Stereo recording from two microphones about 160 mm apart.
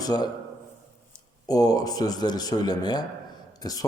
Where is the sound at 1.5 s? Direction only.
25° left (ahead or behind).